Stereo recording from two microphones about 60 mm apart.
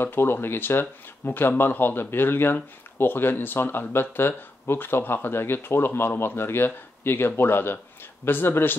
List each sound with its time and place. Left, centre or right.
0.0 s speech: left